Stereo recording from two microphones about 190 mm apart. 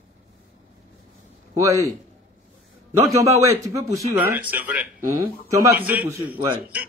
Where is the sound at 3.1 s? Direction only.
15° right (ahead or behind).